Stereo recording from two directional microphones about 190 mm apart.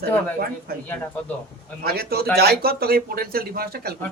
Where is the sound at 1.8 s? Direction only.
55° right (ahead or behind).